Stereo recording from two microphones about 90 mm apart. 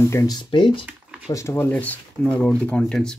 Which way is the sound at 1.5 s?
20° left (ahead or behind).